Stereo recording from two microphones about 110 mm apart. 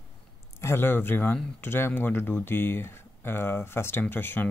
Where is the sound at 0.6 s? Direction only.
20° left (ahead or behind).